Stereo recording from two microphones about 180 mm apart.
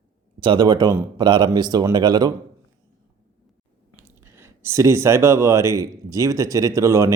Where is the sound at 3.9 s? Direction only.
15° right (ahead or behind).